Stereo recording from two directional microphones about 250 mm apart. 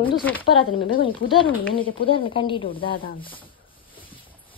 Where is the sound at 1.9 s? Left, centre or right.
Left.